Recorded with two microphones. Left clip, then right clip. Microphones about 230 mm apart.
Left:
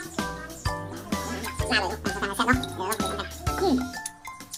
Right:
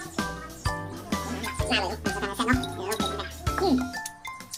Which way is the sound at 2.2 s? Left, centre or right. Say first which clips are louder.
Left 3 dB; left.